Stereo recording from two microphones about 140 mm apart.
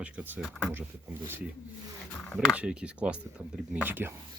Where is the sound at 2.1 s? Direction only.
5° left (ahead or behind).